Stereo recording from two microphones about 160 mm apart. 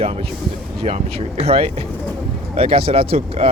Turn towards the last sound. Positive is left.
turn(degrees=-35)  # may be behind; listen again after turning